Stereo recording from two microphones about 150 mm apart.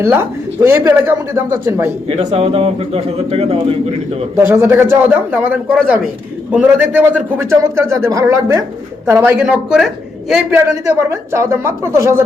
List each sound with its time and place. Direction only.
0.0 s a man's voice: 15° right (ahead or behind)
2.0 s a man's voice: 40° right (ahead or behind)
4.4 s a man's voice: 15° right (ahead or behind)
9.5 s speech: 5° right (ahead or behind)
10.5 s speech: 20° right (ahead or behind)